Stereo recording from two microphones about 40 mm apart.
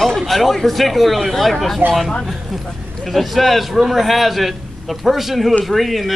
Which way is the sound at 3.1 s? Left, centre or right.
Centre.